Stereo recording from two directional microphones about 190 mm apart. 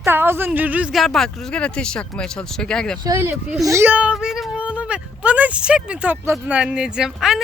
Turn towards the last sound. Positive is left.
turn(degrees=0)  # may be behind; listen again after turning